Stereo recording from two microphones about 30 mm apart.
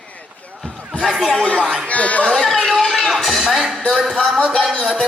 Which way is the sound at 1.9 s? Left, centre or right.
Left.